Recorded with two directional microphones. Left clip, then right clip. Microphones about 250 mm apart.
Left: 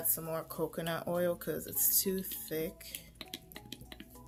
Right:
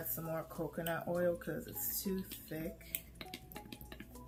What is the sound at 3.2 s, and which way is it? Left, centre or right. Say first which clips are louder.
Drip: left 2 dB; centre.